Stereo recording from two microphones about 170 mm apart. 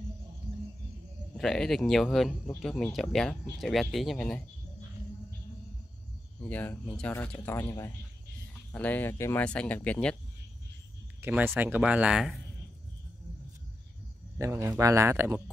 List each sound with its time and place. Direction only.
1.3 s speech: centre (ahead or behind)
6.4 s speech: 10° left (ahead or behind)
11.1 s speech: 10° right (ahead or behind)
14.4 s speech: 15° right (ahead or behind)